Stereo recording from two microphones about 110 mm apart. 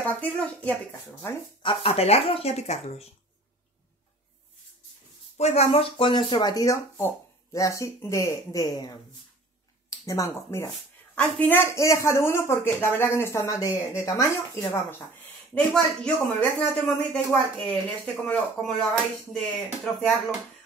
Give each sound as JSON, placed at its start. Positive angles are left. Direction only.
{"t": 0.0, "sound": "speech", "side_deg": 15}
{"t": 1.6, "sound": "speech", "side_deg": 55}
{"t": 5.4, "sound": "speech", "side_deg": 75}
{"t": 15.5, "sound": "speech", "side_deg": 10}